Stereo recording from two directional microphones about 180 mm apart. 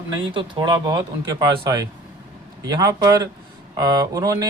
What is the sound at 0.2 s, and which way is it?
Speech, 25° right (ahead or behind).